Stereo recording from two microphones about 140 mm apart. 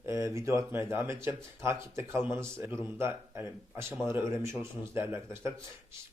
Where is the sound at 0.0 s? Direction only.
20° right (ahead or behind).